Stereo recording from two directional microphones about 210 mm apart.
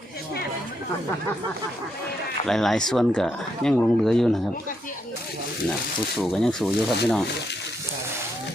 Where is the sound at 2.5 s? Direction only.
Centre (ahead or behind).